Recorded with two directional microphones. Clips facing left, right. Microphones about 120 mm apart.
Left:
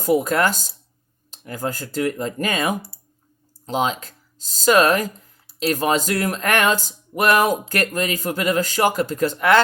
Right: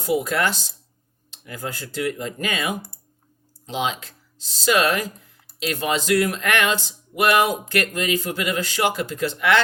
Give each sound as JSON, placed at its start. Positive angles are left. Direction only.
{"t": 0.0, "sound": "speech", "side_deg": 45}